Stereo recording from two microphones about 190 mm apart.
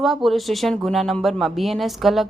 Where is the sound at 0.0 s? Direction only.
Centre (ahead or behind).